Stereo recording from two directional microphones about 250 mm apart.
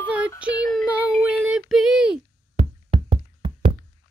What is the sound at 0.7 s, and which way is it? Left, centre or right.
Child singing, centre.